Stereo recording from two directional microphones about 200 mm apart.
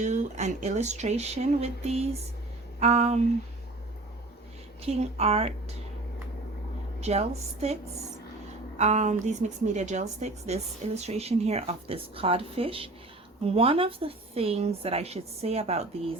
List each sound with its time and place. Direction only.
0.0 s a woman's voice: 35° right (ahead or behind)
4.8 s a woman's voice: 30° right (ahead or behind)
7.0 s a woman's voice: 35° right (ahead or behind)
8.8 s a woman's voice: 35° right (ahead or behind)